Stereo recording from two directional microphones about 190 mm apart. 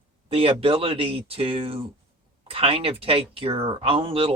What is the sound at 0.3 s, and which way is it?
Speech, 30° right (ahead or behind).